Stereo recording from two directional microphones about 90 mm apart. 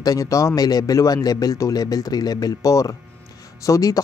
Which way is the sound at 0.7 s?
45° left (ahead or behind).